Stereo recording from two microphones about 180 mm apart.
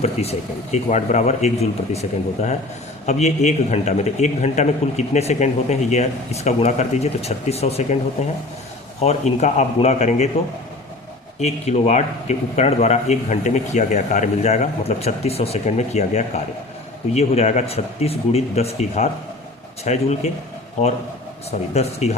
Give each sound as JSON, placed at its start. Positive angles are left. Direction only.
{"t": 0.0, "sound": "a man's voice", "side_deg": 35}
{"t": 11.3, "sound": "a man's voice", "side_deg": 35}
{"t": 21.7, "sound": "a man's voice", "side_deg": 35}